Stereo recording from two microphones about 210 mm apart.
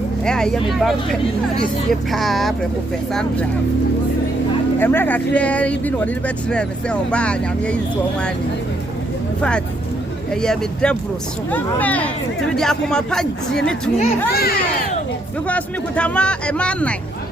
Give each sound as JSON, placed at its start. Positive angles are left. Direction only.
{"t": 0.3, "sound": "speech", "side_deg": 5}
{"t": 2.0, "sound": "speech", "side_deg": 0}
{"t": 4.8, "sound": "speech", "side_deg": 10}
{"t": 10.4, "sound": "speech", "side_deg": 5}
{"t": 14.3, "sound": "speech", "side_deg": 45}
{"t": 15.4, "sound": "speech", "side_deg": 5}